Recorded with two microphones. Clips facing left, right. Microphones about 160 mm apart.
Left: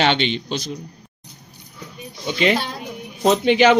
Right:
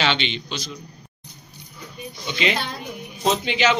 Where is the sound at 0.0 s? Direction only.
50° left (ahead or behind).